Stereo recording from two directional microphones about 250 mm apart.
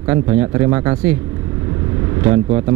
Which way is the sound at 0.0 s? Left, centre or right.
Centre.